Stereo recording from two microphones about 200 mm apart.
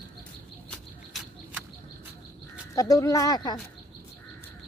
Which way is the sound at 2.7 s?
15° left (ahead or behind).